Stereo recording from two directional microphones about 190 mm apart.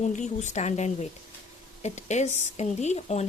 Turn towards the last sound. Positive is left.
turn(degrees=35)  # may be behind; listen again after turning